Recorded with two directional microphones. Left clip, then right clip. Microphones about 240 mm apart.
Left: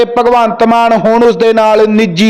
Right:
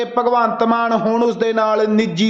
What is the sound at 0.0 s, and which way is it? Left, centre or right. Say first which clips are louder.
A man's voice: left 8 dB; left.